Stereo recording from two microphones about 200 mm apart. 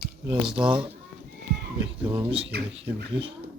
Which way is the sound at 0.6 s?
25° right (ahead or behind).